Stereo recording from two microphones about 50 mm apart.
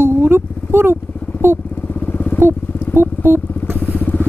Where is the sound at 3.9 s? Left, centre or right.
Left.